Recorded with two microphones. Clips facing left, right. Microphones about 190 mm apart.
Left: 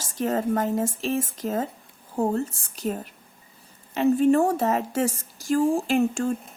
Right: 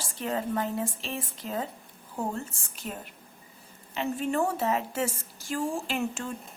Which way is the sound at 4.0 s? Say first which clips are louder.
Left 9 dB; 40° left (ahead or behind).